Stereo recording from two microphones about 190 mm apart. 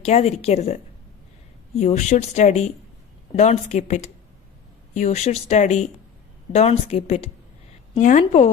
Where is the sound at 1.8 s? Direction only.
35° left (ahead or behind).